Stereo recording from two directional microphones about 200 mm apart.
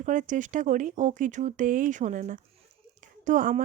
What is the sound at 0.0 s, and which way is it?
A woman's voice, 40° right (ahead or behind).